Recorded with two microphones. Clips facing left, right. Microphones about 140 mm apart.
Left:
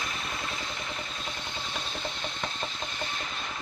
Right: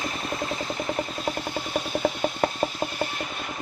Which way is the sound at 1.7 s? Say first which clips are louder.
Right 13 dB; 45° right (ahead or behind).